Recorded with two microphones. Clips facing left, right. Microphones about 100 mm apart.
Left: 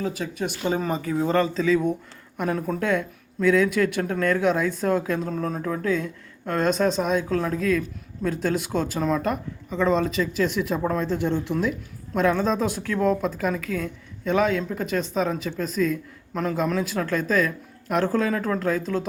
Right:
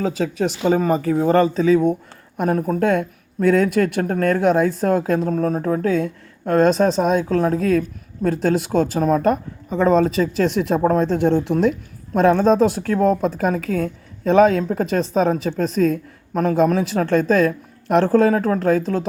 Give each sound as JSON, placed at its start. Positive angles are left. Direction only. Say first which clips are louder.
{"t": 0.0, "sound": "speech", "louder": "right 7 dB", "side_deg": -80}
{"t": 0.7, "sound": "a woman's voice", "louder": "right 8 dB", "side_deg": -40}
{"t": 14.5, "sound": "speech", "louder": "right 6 dB", "side_deg": -35}
{"t": 14.9, "sound": "a woman's voice", "louder": "right 6 dB", "side_deg": -55}